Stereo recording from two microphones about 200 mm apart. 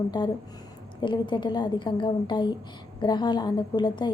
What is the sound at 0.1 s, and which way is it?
A woman's voice, 20° left (ahead or behind).